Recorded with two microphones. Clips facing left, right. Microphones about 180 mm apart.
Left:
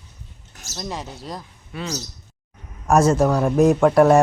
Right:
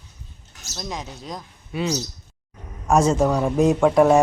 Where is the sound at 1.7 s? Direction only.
15° right (ahead or behind).